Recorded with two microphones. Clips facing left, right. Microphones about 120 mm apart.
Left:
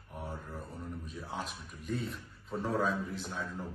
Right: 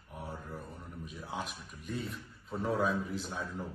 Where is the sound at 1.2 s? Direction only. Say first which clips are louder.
Right 2 dB; 5° right (ahead or behind).